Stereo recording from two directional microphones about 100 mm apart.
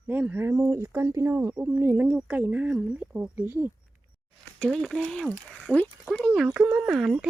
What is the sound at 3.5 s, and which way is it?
Speech, 25° right (ahead or behind).